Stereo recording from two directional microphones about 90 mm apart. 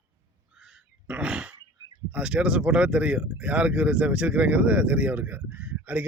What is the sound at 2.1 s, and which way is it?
Speech, 10° right (ahead or behind).